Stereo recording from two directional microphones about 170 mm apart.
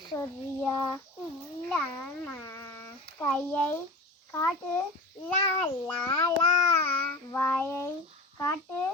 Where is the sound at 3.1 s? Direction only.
10° left (ahead or behind).